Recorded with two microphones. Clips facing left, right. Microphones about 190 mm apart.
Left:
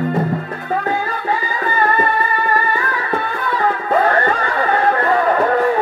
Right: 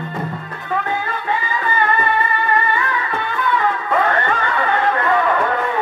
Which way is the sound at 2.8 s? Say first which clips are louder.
Left 2 dB; 35° left (ahead or behind).